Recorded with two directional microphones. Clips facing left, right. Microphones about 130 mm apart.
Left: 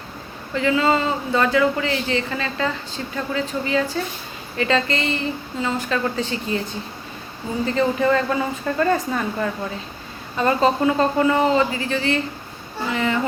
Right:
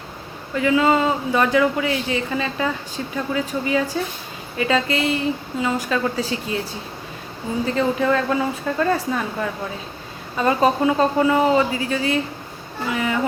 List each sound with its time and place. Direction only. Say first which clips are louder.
0.5 s speech: right 2 dB; 10° right (ahead or behind)
7.6 s speech: left 1 dB; 5° right (ahead or behind)